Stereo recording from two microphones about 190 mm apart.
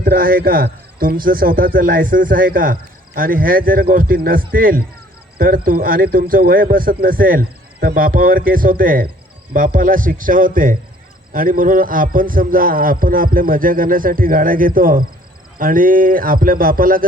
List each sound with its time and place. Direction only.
0.0 s speech: 50° right (ahead or behind)